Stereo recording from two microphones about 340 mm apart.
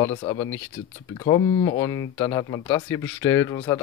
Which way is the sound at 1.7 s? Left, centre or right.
Centre.